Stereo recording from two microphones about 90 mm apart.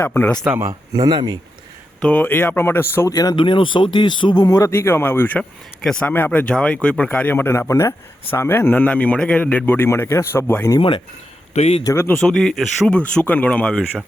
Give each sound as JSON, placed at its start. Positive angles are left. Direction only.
{"t": 0.0, "sound": "a man's voice", "side_deg": 25}
{"t": 0.9, "sound": "speech", "side_deg": -50}
{"t": 2.0, "sound": "a man's voice", "side_deg": 15}
{"t": 3.1, "sound": "speech", "side_deg": 45}
{"t": 3.3, "sound": "speech", "side_deg": 65}
{"t": 4.4, "sound": "a man's voice", "side_deg": 40}
{"t": 5.4, "sound": "speech", "side_deg": 10}
{"t": 6.1, "sound": "a man's voice", "side_deg": 20}
{"t": 10.8, "sound": "speech", "side_deg": 65}
{"t": 11.9, "sound": "a man's voice", "side_deg": 25}
{"t": 12.2, "sound": "speech", "side_deg": 5}
{"t": 13.2, "sound": "speech", "side_deg": 15}